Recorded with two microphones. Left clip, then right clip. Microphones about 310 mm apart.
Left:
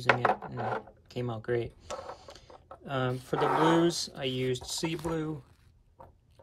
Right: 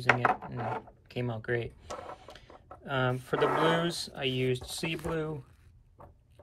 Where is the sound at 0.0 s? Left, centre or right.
Left.